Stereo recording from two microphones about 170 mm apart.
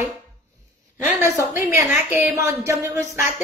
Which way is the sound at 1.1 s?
15° right (ahead or behind).